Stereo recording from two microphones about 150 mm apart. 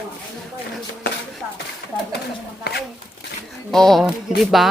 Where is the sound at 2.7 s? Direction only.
90° left.